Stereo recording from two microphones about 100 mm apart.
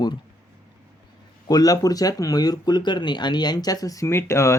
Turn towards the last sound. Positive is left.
turn(degrees=30)  # may be behind; listen again after turning